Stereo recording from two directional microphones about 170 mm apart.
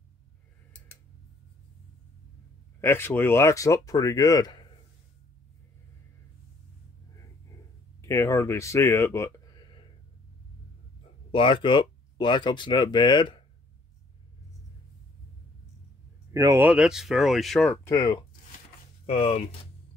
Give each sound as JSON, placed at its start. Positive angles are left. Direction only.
{"t": 2.8, "sound": "speech", "side_deg": 15}
{"t": 8.0, "sound": "speech", "side_deg": 15}
{"t": 11.3, "sound": "speech", "side_deg": 30}
{"t": 16.3, "sound": "speech", "side_deg": -15}
{"t": 17.8, "sound": "speech", "side_deg": 20}
{"t": 19.0, "sound": "speech", "side_deg": 35}